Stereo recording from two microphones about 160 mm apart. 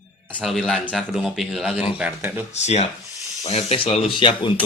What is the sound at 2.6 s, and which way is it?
A man's voice, 45° left (ahead or behind).